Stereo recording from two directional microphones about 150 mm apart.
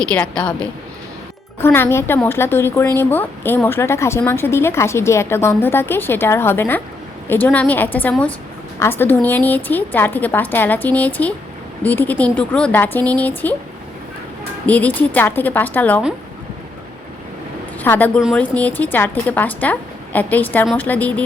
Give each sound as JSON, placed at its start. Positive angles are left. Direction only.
{"t": 0.0, "sound": "a woman's voice", "side_deg": 5}
{"t": 14.7, "sound": "a woman's voice", "side_deg": 10}
{"t": 17.7, "sound": "a woman's voice", "side_deg": 10}